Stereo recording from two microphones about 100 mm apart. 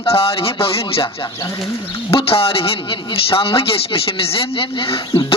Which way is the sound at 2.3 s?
70° left (ahead or behind).